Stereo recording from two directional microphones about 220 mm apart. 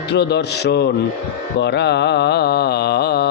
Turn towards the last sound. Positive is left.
turn(degrees=45)  # may be behind; listen again after turning